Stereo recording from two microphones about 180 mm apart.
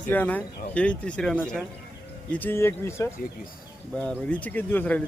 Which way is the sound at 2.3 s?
10° left (ahead or behind).